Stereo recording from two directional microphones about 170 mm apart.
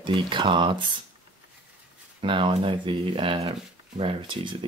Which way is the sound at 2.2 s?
30° right (ahead or behind).